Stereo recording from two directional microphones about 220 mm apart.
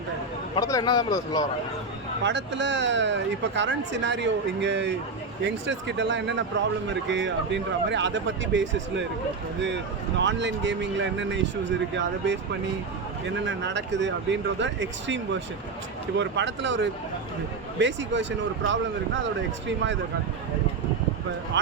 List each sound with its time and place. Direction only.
0.5 s a man's voice: 15° left (ahead or behind)
2.2 s speech: 55° right (ahead or behind)
10.2 s speech: 55° right (ahead or behind)
21.5 s speech: 55° right (ahead or behind)